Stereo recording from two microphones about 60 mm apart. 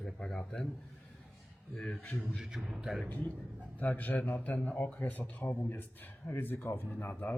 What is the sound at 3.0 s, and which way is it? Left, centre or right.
A man's voice, left.